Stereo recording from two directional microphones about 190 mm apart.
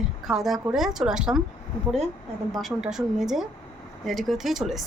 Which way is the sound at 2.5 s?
Centre (ahead or behind).